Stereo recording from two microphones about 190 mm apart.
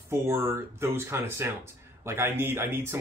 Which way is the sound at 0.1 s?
15° right (ahead or behind).